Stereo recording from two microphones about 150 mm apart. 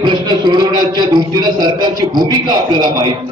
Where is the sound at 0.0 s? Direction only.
30° right (ahead or behind).